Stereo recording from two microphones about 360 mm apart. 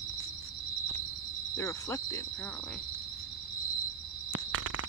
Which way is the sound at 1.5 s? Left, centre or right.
Centre.